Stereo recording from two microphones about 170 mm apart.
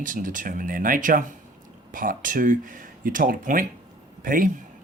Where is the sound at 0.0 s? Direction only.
50° right (ahead or behind).